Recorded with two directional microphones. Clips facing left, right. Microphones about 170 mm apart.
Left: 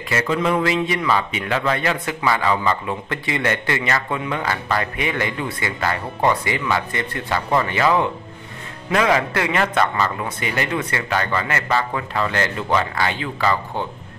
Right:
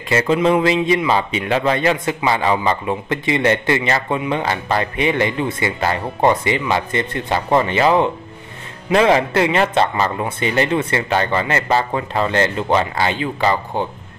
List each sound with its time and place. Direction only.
0.1 s speech: 25° right (ahead or behind)